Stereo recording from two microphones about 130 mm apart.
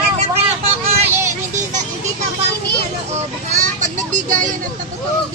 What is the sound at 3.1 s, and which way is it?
Vehicle, 70° right (ahead or behind).